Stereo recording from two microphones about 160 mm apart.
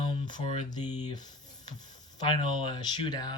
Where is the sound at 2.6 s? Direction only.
25° left (ahead or behind).